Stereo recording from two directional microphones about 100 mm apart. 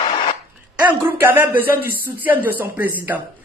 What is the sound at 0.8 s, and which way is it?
Speech, 20° right (ahead or behind).